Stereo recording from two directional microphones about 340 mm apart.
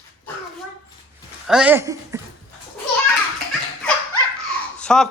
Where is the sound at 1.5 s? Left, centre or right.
Centre.